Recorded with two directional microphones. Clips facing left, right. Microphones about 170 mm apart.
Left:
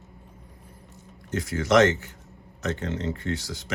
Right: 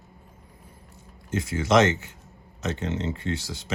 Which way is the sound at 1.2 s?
25° right (ahead or behind).